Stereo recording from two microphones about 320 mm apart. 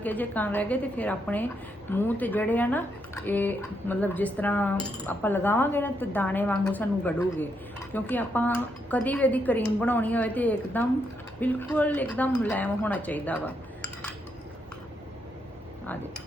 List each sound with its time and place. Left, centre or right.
0.0 s speech: centre